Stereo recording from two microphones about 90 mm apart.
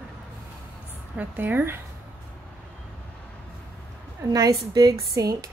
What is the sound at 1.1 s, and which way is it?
Speech, 20° right (ahead or behind).